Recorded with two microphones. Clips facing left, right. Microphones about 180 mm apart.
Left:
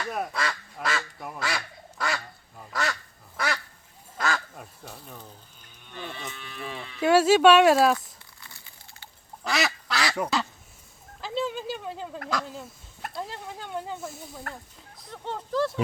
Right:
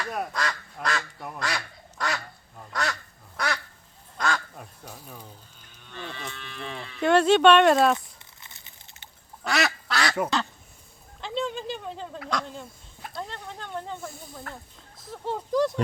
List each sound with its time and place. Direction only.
0.0 s duck: centre (ahead or behind)
4.2 s quack: centre (ahead or behind)
4.9 s speech: 10° right (ahead or behind)
5.9 s livestock: 10° left (ahead or behind)
7.9 s a sound: 20° right (ahead or behind)
9.4 s duck: centre (ahead or behind)
11.2 s a sound: 5° left (ahead or behind)
12.3 s speech: 5° left (ahead or behind); by 15.7 s 15° right (ahead or behind)